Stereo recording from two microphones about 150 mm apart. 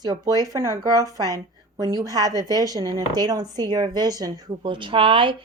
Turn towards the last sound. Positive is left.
turn(degrees=-35)  # may be behind; listen again after turning